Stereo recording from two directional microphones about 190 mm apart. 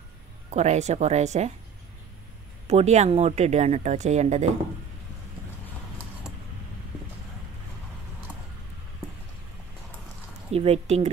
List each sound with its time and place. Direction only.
0.5 s speech: 35° right (ahead or behind)
2.7 s speech: 35° right (ahead or behind)
10.5 s speech: 35° right (ahead or behind)